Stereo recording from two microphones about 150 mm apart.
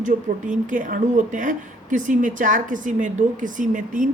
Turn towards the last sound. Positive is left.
turn(degrees=-60)  # may be behind; listen again after turning